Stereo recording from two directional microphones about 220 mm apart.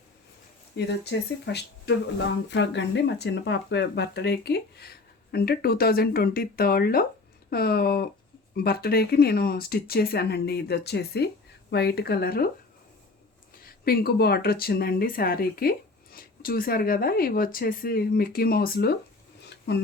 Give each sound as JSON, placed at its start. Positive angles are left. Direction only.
{"t": 0.8, "sound": "speech", "side_deg": 50}
{"t": 13.7, "sound": "speech", "side_deg": 45}
{"t": 19.5, "sound": "a sound", "side_deg": 50}